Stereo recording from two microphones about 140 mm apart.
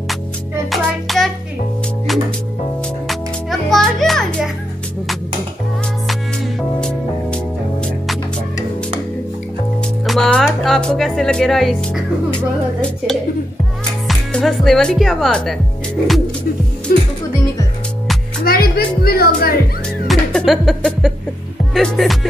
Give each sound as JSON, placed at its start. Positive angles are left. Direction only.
{"t": 0.7, "sound": "music", "side_deg": 0}
{"t": 3.1, "sound": "music", "side_deg": 0}
{"t": 6.8, "sound": "music", "side_deg": 10}
{"t": 10.0, "sound": "speech", "side_deg": 0}
{"t": 16.9, "sound": "speech", "side_deg": 90}
{"t": 18.4, "sound": "a woman's voice", "side_deg": 90}
{"t": 20.1, "sound": "music", "side_deg": 0}
{"t": 21.7, "sound": "speech", "side_deg": 0}